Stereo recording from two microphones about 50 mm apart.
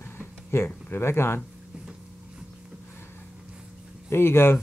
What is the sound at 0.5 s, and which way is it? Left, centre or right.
Speech, left.